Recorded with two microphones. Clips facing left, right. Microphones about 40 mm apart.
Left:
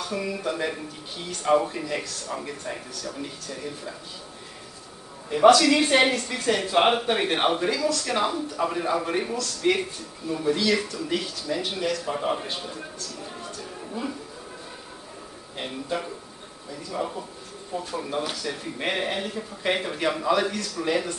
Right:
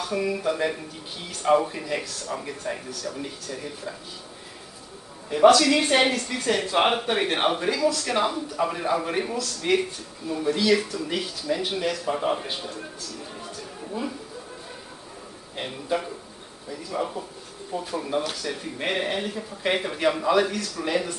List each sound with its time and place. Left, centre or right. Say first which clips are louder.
0.0 s a woman's voice: right 3 dB; centre
5.3 s a woman's voice: even; centre
15.5 s a woman's voice: right 2 dB; centre